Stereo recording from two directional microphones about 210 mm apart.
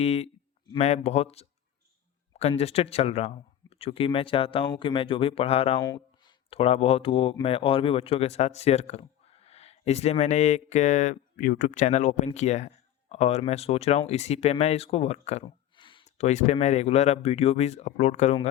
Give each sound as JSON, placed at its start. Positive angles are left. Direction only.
{"t": 0.0, "sound": "speech", "side_deg": 30}